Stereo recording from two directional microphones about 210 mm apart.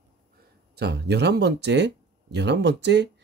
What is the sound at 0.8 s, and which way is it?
Speech, 50° right (ahead or behind).